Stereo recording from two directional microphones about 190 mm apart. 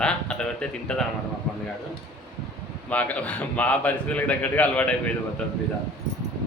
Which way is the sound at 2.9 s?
5° left (ahead or behind).